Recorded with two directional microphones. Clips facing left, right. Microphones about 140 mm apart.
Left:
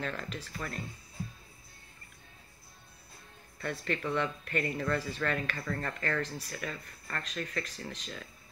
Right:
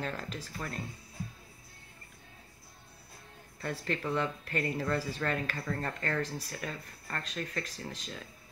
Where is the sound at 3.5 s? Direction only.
35° right (ahead or behind).